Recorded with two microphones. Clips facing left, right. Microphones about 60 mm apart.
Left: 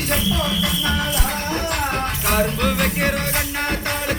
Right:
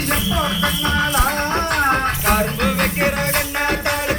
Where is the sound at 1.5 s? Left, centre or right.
Right.